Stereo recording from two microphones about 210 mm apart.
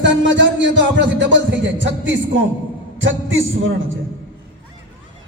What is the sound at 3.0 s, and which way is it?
Speech, 70° right (ahead or behind).